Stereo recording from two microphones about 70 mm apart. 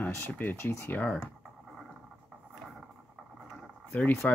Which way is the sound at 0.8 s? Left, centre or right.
Left.